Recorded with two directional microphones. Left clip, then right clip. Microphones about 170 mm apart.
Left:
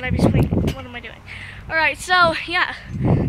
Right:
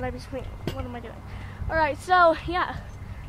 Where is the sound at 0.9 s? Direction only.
15° left (ahead or behind).